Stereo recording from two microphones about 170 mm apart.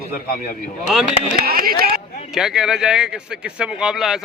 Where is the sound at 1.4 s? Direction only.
60° right (ahead or behind).